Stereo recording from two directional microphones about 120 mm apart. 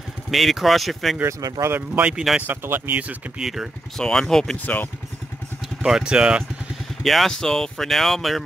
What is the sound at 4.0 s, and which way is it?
Speech, 5° left (ahead or behind).